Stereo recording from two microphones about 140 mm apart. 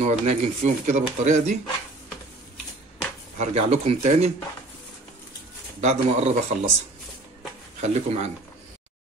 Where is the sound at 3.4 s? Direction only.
50° right (ahead or behind).